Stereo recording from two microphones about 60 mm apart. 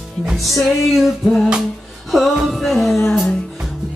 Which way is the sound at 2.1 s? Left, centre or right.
Centre.